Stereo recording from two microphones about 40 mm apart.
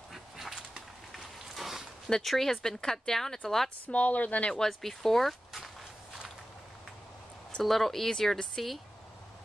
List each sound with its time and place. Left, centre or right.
0.1 s fowl: centre
1.1 s a sound: centre
2.2 s speech: centre
3.8 s speech: left
4.6 s speech: centre
7.6 s speech: centre